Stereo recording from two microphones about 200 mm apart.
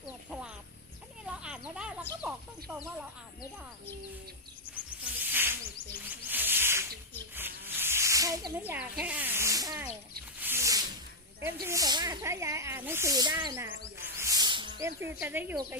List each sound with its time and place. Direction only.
0.0 s a sound: 5° right (ahead or behind)
1.4 s children playing: 5° right (ahead or behind)
2.2 s speech: 5° right (ahead or behind)
5.2 s snake: 10° right (ahead or behind)
6.1 s a sound: 10° right (ahead or behind)
7.3 s snake: 10° right (ahead or behind)
11.6 s speech: 15° right (ahead or behind)
14.2 s music: 15° right (ahead or behind)
15.0 s speech: 10° right (ahead or behind)